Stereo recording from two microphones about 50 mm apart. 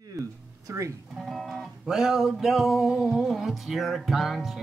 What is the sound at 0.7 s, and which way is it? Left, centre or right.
Speech, right.